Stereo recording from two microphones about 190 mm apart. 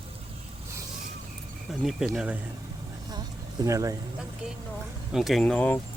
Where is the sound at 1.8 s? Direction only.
Centre (ahead or behind).